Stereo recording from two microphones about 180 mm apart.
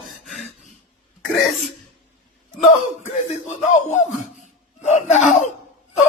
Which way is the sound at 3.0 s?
40° left (ahead or behind).